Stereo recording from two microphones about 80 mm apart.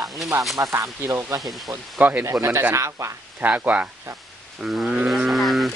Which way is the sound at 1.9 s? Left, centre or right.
Centre.